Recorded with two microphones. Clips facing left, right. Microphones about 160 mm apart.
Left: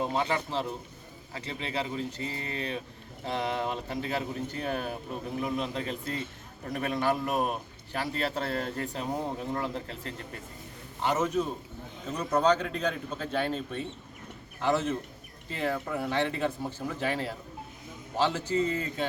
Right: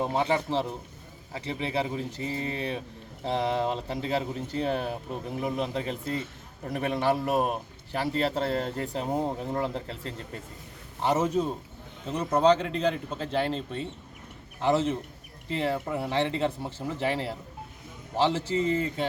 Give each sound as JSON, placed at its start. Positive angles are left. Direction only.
{"t": 0.0, "sound": "speech", "side_deg": -25}